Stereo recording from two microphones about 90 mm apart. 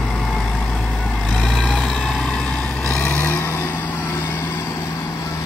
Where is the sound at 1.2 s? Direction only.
Centre (ahead or behind).